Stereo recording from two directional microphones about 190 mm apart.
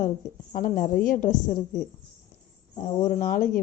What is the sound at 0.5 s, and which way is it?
A woman's voice, 45° left (ahead or behind).